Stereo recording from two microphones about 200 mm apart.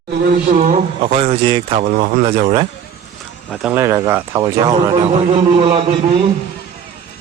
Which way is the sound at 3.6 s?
10° right (ahead or behind).